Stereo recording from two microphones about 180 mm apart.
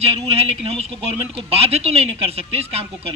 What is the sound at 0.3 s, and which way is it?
Speech, 35° right (ahead or behind).